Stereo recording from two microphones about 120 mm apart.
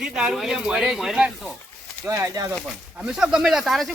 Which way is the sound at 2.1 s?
25° right (ahead or behind).